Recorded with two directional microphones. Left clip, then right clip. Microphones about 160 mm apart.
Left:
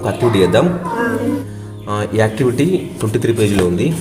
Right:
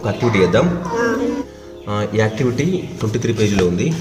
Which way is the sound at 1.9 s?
30° left (ahead or behind).